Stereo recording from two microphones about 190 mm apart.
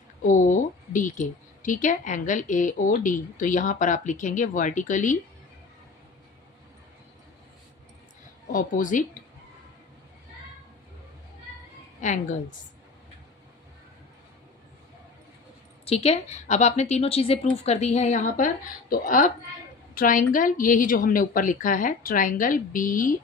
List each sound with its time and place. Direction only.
0.3 s speech: 40° left (ahead or behind)
8.5 s a woman's voice: 45° left (ahead or behind)
11.9 s speech: 40° left (ahead or behind)
15.9 s a woman's voice: 30° left (ahead or behind)